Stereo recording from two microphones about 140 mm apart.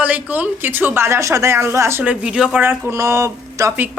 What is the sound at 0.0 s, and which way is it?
A woman's voice, 10° right (ahead or behind).